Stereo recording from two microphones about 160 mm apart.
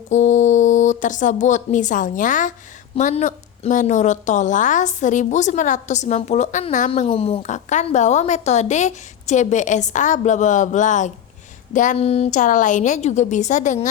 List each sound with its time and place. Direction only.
0.1 s a woman's voice: 50° left (ahead or behind)